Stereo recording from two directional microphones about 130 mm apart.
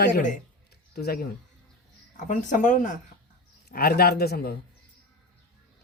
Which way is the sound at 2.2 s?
75° left (ahead or behind).